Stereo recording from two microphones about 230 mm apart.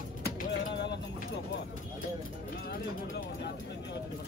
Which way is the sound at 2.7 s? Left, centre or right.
Left.